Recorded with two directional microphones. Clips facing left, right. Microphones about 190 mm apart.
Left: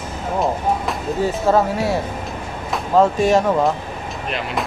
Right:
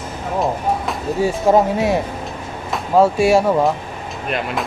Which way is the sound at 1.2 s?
15° right (ahead or behind).